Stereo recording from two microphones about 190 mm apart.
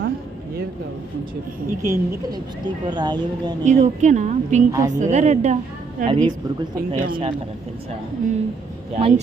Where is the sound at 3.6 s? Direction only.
40° right (ahead or behind).